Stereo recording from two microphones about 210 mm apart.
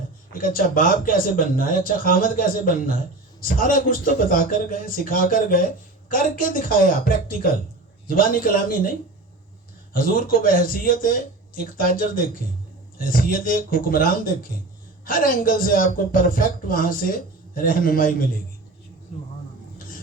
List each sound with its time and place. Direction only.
0.3 s a woman's voice: 40° left (ahead or behind)